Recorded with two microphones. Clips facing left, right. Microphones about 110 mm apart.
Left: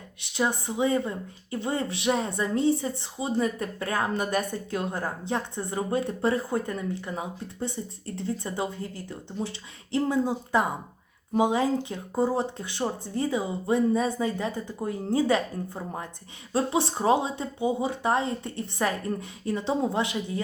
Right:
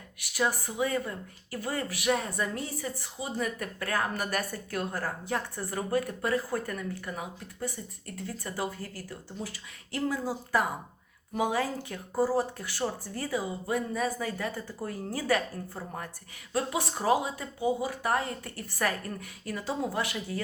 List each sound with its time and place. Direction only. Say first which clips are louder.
0.2 s speech: left 2 dB; 25° left (ahead or behind)